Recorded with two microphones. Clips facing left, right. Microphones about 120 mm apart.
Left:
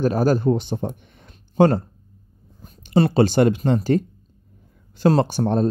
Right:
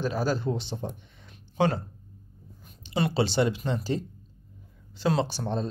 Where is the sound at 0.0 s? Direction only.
50° left (ahead or behind).